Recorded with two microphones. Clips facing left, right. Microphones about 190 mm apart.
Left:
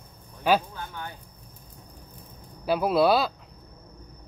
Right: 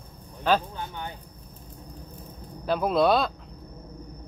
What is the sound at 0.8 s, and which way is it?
Speech, 20° right (ahead or behind).